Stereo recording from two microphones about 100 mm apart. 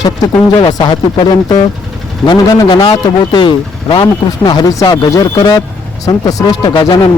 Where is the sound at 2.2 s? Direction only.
55° left (ahead or behind).